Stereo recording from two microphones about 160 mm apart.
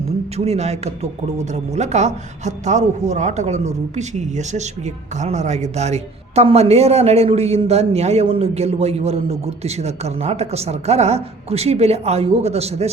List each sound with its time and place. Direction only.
0.3 s speech: 40° right (ahead or behind)